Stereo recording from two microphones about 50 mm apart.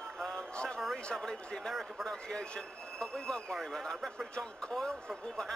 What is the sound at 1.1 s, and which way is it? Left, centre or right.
Speech, centre.